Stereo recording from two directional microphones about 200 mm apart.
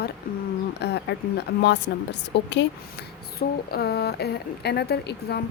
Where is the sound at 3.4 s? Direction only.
50° left (ahead or behind).